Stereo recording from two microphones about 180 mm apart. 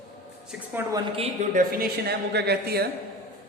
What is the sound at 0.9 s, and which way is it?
Speech, 20° right (ahead or behind).